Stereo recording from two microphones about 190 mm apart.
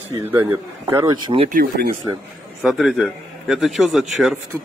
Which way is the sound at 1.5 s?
50° right (ahead or behind).